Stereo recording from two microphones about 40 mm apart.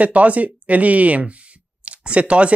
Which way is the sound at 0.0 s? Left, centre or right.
Right.